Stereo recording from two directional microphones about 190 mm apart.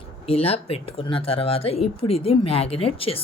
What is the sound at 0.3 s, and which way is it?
Speech, 30° left (ahead or behind).